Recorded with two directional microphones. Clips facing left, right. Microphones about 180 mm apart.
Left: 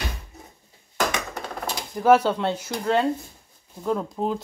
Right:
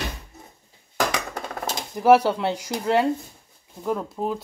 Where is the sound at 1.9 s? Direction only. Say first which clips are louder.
Right 1 dB; 10° right (ahead or behind).